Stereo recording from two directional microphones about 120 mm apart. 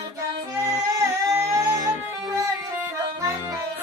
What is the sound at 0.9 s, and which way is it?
Music, 25° right (ahead or behind).